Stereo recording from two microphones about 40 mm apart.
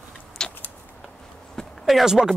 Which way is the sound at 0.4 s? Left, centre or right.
Centre.